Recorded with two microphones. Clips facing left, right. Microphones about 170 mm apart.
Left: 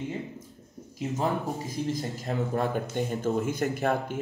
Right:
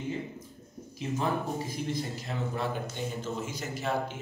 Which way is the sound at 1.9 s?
45° left (ahead or behind).